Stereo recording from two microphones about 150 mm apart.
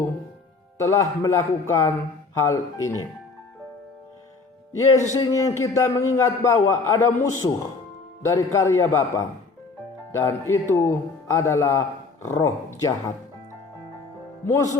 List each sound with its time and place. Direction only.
0.8 s a man's voice: 20° left (ahead or behind)
5.1 s a man's voice: 25° left (ahead or behind)
14.4 s a man's voice: 20° left (ahead or behind)